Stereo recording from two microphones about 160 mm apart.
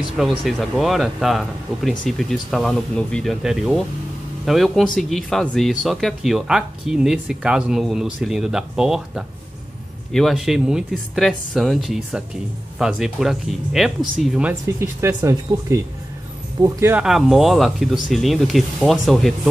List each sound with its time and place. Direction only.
0.2 s speech: centre (ahead or behind)
14.5 s speech: 15° right (ahead or behind)
17.0 s speech: centre (ahead or behind)